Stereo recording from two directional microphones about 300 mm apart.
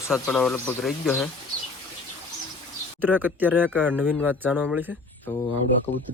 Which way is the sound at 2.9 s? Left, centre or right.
Centre.